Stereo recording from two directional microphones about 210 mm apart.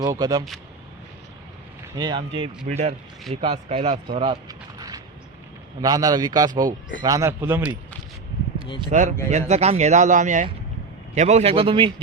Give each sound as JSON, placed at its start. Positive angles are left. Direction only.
{"t": 0.0, "sound": "speech", "side_deg": -20}
{"t": 1.8, "sound": "speech", "side_deg": -20}
{"t": 4.4, "sound": "a sound", "side_deg": -15}
{"t": 5.8, "sound": "a man's voice", "side_deg": -20}
{"t": 8.9, "sound": "speech", "side_deg": -35}